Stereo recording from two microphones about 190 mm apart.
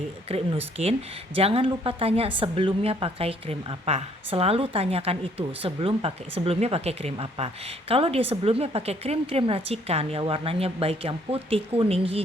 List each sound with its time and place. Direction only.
0.3 s a woman's voice: 30° right (ahead or behind)